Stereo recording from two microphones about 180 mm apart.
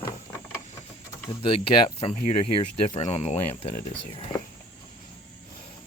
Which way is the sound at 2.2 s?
40° left (ahead or behind).